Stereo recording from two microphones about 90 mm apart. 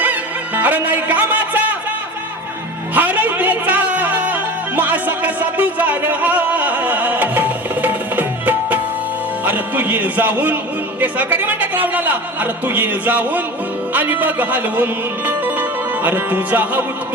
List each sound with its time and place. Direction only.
0.0 s music: 20° right (ahead or behind)
2.9 s music: 20° right (ahead or behind)
9.4 s a man's voice: 20° right (ahead or behind)
15.3 s music: 20° right (ahead or behind)
16.0 s a man's voice: 20° right (ahead or behind)